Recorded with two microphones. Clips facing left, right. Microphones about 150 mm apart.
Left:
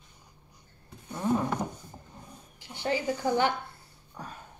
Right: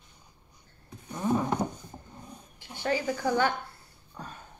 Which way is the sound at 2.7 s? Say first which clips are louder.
Even; 15° left (ahead or behind).